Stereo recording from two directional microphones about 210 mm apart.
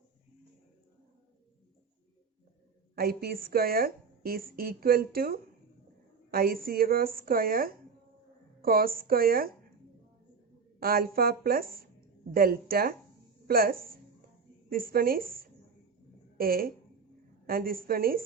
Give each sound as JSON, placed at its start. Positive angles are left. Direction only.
{"t": 2.9, "sound": "a woman's voice", "side_deg": -45}
{"t": 10.8, "sound": "a woman's voice", "side_deg": -45}